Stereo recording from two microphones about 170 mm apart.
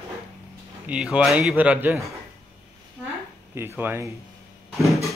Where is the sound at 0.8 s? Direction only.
5° right (ahead or behind).